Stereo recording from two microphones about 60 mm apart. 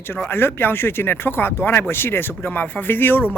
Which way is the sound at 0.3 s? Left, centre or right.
Left.